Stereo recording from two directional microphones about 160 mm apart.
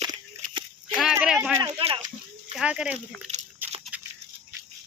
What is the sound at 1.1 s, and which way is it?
Speech, 10° right (ahead or behind).